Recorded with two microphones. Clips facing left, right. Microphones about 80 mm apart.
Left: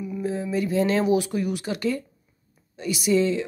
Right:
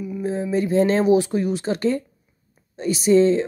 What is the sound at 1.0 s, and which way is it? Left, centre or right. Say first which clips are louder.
Speech: right 5 dB; right.